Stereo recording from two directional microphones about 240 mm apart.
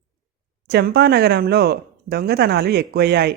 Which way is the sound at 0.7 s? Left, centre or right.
Right.